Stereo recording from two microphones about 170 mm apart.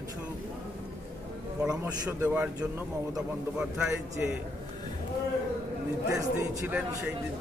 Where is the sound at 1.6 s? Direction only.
5° right (ahead or behind).